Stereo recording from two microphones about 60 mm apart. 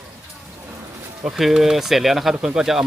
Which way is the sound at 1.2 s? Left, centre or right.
Centre.